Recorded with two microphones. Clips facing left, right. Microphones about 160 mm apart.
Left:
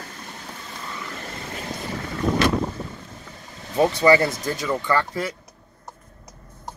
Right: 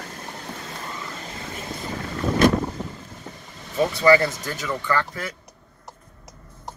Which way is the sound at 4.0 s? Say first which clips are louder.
Right 2 dB; 25° left (ahead or behind).